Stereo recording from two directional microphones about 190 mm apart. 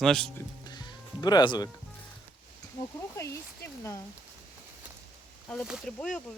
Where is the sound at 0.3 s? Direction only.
20° left (ahead or behind).